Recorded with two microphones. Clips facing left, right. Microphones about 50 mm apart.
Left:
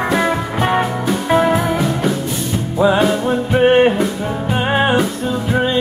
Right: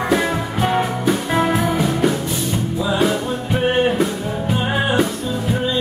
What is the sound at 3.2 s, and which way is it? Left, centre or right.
Music, left.